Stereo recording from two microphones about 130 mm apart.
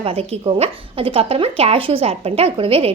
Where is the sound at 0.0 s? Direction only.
50° right (ahead or behind).